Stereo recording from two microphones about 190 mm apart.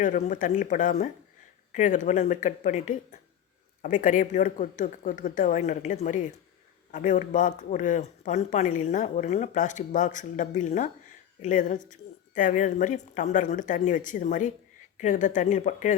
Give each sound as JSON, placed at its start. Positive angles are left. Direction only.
{"t": 0.0, "sound": "speech", "side_deg": 40}